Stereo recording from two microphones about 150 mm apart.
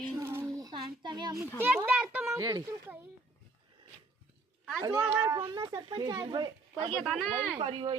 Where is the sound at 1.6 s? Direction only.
10° right (ahead or behind).